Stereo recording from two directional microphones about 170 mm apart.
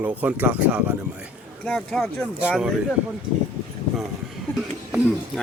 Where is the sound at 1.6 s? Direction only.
5° left (ahead or behind).